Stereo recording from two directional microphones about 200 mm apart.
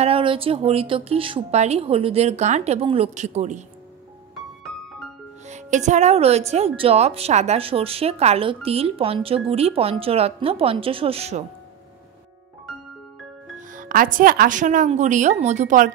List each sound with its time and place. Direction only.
0.0 s a woman's voice: 25° right (ahead or behind)
5.5 s a woman's voice: 35° right (ahead or behind)
13.6 s speech: 40° right (ahead or behind)